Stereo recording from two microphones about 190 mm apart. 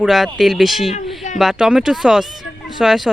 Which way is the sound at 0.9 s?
40° left (ahead or behind).